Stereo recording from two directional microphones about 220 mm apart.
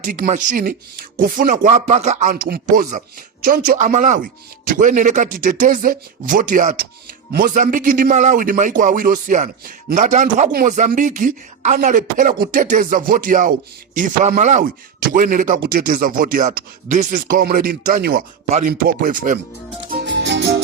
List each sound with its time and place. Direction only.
0.0 s a man's voice: 35° right (ahead or behind)
19.9 s music: 50° right (ahead or behind)